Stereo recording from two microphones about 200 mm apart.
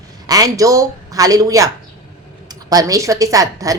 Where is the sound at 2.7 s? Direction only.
15° right (ahead or behind).